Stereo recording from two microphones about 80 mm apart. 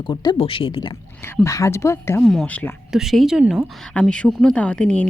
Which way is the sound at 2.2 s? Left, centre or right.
Centre.